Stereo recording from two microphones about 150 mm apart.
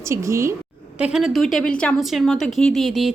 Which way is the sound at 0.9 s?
5° right (ahead or behind).